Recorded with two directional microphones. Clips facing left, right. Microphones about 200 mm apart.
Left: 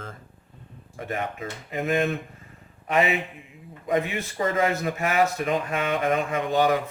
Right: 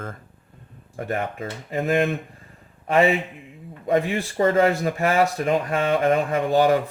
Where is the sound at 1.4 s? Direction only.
35° right (ahead or behind).